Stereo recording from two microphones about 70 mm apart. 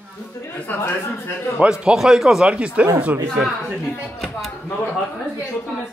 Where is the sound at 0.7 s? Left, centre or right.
Left.